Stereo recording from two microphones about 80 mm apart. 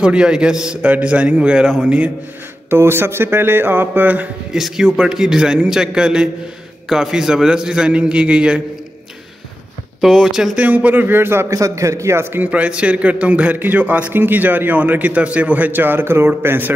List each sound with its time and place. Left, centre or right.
0.0 s a man's voice: centre
2.7 s a man's voice: right
4.5 s a man's voice: centre
9.9 s a man's voice: centre
10.6 s a man's voice: centre
12.4 s a man's voice: centre